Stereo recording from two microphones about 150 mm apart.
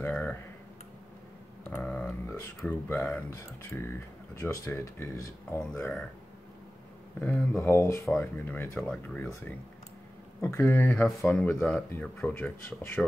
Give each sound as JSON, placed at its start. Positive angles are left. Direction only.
{"t": 0.0, "sound": "typing", "side_deg": 10}
{"t": 1.7, "sound": "a sound", "side_deg": 10}
{"t": 3.7, "sound": "speech", "side_deg": 10}
{"t": 5.6, "sound": "speech", "side_deg": 5}
{"t": 7.2, "sound": "speech", "side_deg": 15}
{"t": 10.9, "sound": "speech", "side_deg": 0}